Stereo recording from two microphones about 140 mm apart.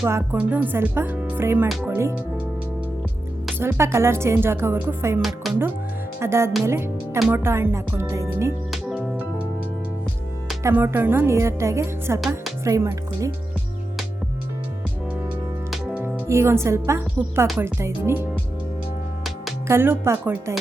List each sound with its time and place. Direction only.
0.0 s speech: 15° right (ahead or behind)
3.6 s speech: 20° right (ahead or behind)
5.2 s speech: centre (ahead or behind)
6.1 s a woman's voice: 20° right (ahead or behind)
8.7 s music: 5° right (ahead or behind)
10.6 s a woman's voice: 20° right (ahead or behind)
15.7 s music: 10° right (ahead or behind)
16.3 s a woman's voice: 20° right (ahead or behind)
19.6 s speech: 15° right (ahead or behind)